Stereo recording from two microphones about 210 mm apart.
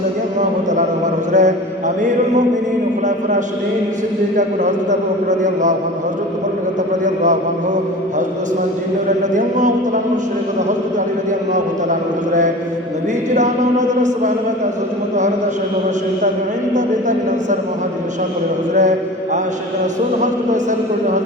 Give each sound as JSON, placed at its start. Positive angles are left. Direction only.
{"t": 0.3, "sound": "a sound", "side_deg": -35}
{"t": 1.3, "sound": "mantra", "side_deg": -35}
{"t": 2.0, "sound": "a man's voice", "side_deg": -35}
{"t": 4.4, "sound": "a man's voice", "side_deg": -35}
{"t": 9.0, "sound": "a man's voice", "side_deg": -35}
{"t": 11.5, "sound": "a man's voice", "side_deg": -35}
{"t": 16.7, "sound": "a man's voice", "side_deg": -35}
{"t": 18.8, "sound": "mantra", "side_deg": -35}
{"t": 20.2, "sound": "a man's voice", "side_deg": -35}